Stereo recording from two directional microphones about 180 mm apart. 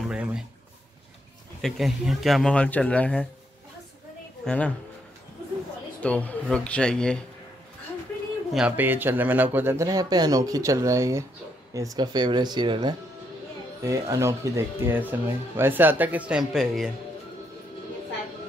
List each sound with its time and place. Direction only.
0.1 s a sound: 5° right (ahead or behind)
1.6 s speech: centre (ahead or behind)
4.5 s speech: 5° left (ahead or behind)
6.0 s speech: 5° left (ahead or behind)
8.5 s speech: 10° right (ahead or behind)